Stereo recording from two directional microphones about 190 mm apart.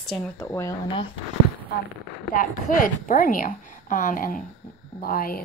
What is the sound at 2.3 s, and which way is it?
A woman's voice, 45° left (ahead or behind).